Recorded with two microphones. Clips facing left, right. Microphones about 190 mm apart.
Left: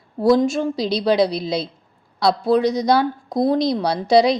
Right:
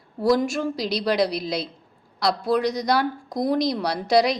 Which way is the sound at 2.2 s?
25° left (ahead or behind).